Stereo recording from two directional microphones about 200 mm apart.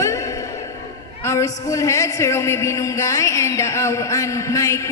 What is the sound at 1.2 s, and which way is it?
A man's voice, 15° left (ahead or behind).